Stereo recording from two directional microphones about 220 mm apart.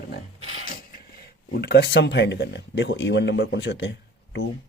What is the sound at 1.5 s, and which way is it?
Speech, 45° left (ahead or behind).